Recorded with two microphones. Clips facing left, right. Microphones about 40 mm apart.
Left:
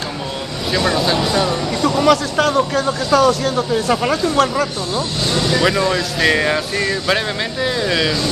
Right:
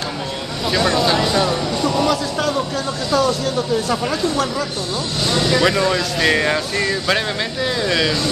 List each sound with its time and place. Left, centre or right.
0.8 s speech: centre
1.8 s speech: left
5.3 s speech: right
5.6 s speech: centre